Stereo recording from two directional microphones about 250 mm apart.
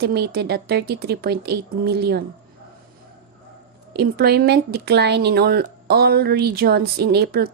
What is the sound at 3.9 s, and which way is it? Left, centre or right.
Speech, right.